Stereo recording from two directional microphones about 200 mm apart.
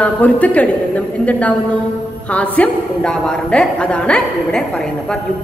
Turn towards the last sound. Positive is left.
turn(degrees=5)  # may be behind; listen again after turning